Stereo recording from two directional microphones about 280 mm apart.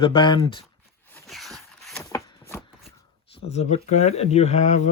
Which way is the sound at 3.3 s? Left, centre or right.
Left.